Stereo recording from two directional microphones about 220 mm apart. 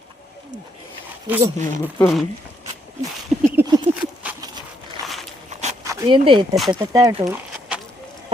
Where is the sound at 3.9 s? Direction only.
30° right (ahead or behind).